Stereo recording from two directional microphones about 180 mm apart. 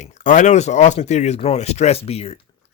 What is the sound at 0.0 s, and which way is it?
Speech, 45° left (ahead or behind).